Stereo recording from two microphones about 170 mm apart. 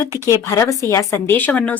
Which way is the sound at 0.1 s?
20° left (ahead or behind).